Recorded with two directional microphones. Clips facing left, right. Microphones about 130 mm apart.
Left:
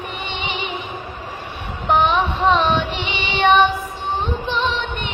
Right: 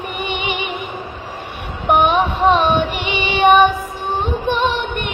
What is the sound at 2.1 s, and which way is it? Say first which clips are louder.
Female singing: right 3 dB; 15° right (ahead or behind).